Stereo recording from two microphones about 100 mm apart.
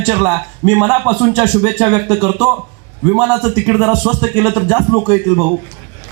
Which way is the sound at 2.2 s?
10° right (ahead or behind).